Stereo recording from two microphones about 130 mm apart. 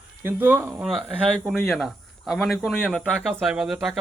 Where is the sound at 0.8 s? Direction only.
Centre (ahead or behind).